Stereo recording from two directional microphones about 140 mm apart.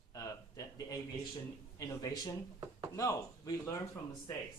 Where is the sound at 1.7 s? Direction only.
25° left (ahead or behind).